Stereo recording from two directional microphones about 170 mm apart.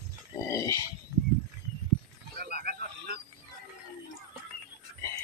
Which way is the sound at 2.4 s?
70° right (ahead or behind).